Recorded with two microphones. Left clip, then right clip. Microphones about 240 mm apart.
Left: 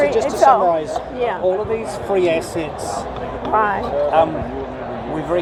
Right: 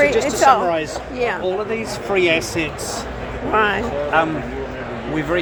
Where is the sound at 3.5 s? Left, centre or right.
Right.